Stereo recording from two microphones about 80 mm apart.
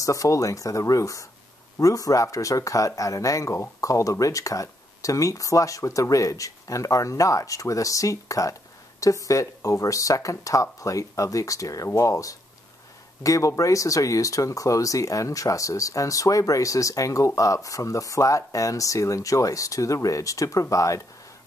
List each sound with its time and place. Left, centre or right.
0.0 s speech: left